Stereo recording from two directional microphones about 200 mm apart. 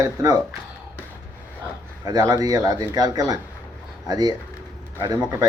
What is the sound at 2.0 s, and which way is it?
A man's voice, 20° right (ahead or behind).